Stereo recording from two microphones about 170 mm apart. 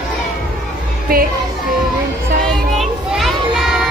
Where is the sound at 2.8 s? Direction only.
Centre (ahead or behind).